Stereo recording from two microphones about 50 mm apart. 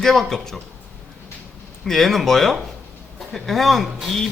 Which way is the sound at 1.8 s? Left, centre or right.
Centre.